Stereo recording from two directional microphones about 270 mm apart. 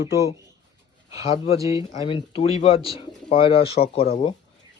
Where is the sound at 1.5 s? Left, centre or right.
Centre.